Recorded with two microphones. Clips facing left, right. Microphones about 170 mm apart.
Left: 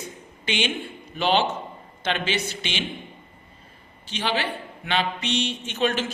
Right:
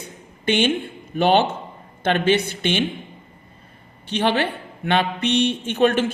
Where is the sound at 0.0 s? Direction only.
55° right (ahead or behind).